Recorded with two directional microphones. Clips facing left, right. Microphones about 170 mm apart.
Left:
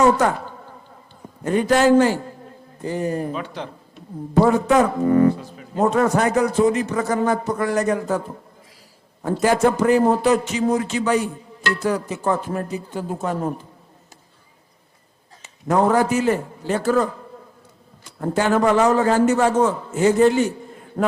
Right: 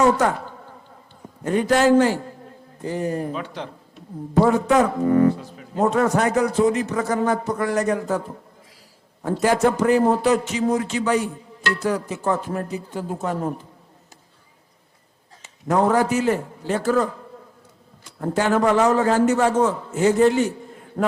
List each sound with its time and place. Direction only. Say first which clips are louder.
0.0 s a man's voice: left 1 dB; 15° left (ahead or behind)
0.3 s a sound: left 1 dB; 25° left (ahead or behind)
1.5 s speech: left 1 dB; 15° left (ahead or behind)
9.6 s speech: left 1 dB; 20° left (ahead or behind)
15.4 s a man's voice: left 1 dB; 15° left (ahead or behind)
18.5 s speech: left 1 dB; 15° left (ahead or behind)
19.5 s speech: left 1 dB; 25° left (ahead or behind)
20.0 s speech: left 1 dB; 10° left (ahead or behind)